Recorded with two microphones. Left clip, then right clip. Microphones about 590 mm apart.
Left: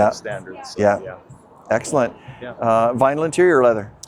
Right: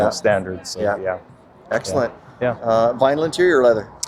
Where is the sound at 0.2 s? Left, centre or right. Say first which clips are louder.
Right 11 dB; right.